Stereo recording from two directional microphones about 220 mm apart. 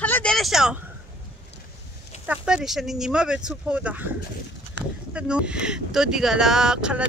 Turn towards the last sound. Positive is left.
turn(degrees=-5)  # may be behind; listen again after turning